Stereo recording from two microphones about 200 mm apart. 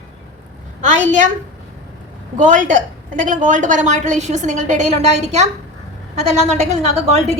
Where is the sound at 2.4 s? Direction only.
40° right (ahead or behind).